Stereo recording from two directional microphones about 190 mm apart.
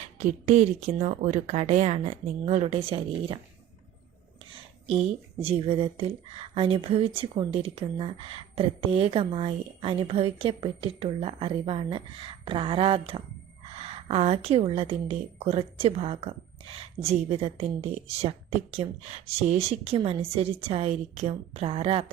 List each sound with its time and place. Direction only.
0.3 s a woman's voice: 40° right (ahead or behind)
4.4 s a woman's voice: 30° right (ahead or behind)